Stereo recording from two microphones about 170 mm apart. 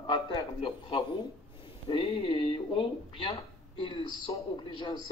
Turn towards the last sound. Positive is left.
turn(degrees=25)  # may be behind; listen again after turning